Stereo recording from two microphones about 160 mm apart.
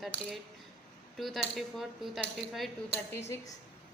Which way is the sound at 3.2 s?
15° left (ahead or behind).